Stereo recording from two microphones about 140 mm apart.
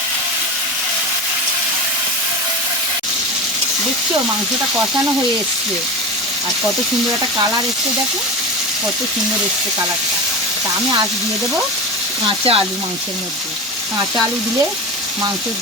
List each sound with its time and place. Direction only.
12.2 s speech: 40° right (ahead or behind)